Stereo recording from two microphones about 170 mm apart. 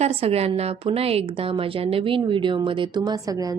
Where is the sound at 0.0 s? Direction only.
35° right (ahead or behind).